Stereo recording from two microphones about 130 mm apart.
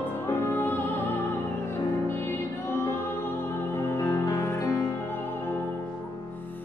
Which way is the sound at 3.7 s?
20° left (ahead or behind).